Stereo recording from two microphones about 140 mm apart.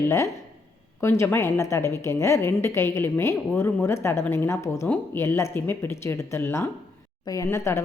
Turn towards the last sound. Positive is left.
turn(degrees=20)  # may be behind; listen again after turning